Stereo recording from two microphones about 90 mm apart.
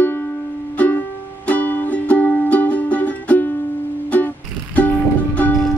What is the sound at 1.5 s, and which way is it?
Music, 20° left (ahead or behind).